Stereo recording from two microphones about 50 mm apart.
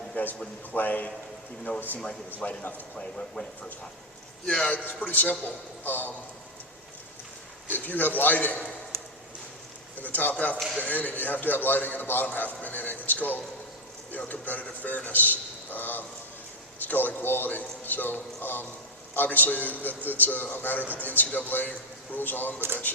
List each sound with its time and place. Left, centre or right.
0.2 s a sound: left
0.7 s a man's voice: left
2.9 s speech: centre
4.9 s a man's voice: left
7.7 s a man's voice: left
8.9 s a sound: right
10.0 s a man's voice: left
12.6 s a sound: left
14.1 s a man's voice: left